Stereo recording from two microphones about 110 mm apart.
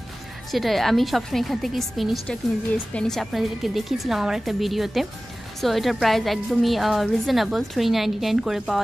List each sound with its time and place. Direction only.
0.5 s a woman's voice: centre (ahead or behind)